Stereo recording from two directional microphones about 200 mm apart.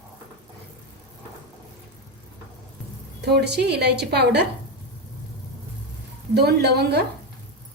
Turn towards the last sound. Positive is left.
turn(degrees=-55)  # may be behind; listen again after turning